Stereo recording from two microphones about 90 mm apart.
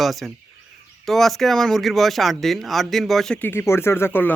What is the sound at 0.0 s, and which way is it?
Speech, centre (ahead or behind).